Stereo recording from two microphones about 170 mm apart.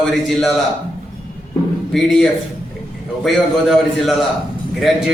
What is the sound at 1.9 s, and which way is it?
A man's voice, 5° left (ahead or behind).